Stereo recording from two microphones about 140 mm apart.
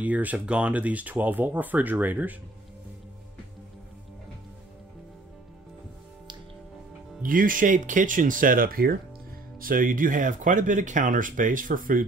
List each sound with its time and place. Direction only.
0.0 s speech: 10° right (ahead or behind)
7.2 s speech: 80° right